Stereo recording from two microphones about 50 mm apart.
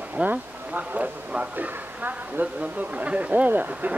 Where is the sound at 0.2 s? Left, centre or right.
Right.